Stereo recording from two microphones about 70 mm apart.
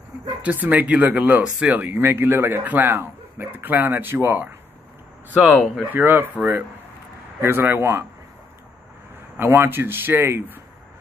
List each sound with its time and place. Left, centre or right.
0.4 s speech: right
2.0 s a man's voice: right
5.4 s a man's voice: right
9.4 s a man's voice: right